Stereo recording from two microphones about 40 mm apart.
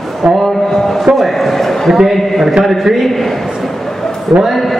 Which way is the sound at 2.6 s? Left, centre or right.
Centre.